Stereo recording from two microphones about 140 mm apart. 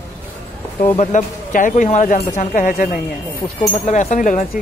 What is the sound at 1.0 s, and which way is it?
Speech, 60° left (ahead or behind).